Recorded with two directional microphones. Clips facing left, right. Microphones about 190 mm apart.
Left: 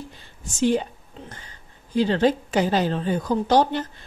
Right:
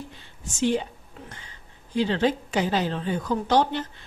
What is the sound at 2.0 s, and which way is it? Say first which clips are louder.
A woman's voice: left 3 dB; 40° left (ahead or behind).